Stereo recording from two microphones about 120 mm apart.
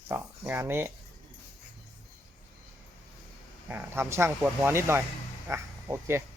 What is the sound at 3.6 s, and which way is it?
Speech, 20° right (ahead or behind).